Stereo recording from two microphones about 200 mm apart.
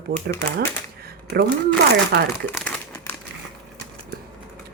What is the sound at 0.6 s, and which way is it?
Typewriter, 50° right (ahead or behind).